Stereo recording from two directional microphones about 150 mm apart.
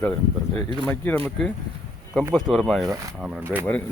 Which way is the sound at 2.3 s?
Centre (ahead or behind).